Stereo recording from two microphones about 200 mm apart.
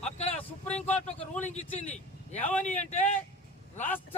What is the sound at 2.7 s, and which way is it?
Speech, 35° left (ahead or behind).